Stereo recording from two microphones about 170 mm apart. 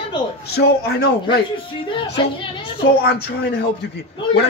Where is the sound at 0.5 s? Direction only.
75° left (ahead or behind).